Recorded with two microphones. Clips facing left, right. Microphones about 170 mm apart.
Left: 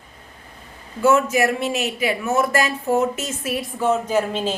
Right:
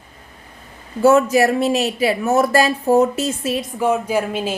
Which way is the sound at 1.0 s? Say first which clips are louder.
Right 4 dB; 35° right (ahead or behind).